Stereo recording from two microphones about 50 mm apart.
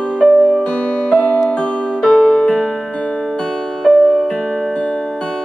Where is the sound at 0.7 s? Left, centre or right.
Left; by 2.9 s centre.